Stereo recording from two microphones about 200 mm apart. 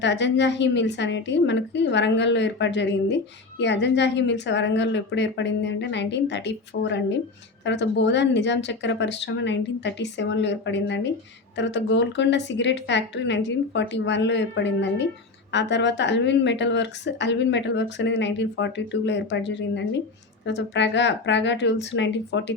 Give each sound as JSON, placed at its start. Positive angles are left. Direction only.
{"t": 0.0, "sound": "speech", "side_deg": 60}